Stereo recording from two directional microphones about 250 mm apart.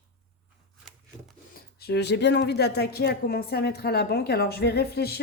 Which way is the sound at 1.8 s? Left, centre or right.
Left.